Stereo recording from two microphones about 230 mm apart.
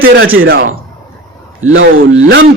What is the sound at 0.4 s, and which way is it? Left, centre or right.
Speech, right.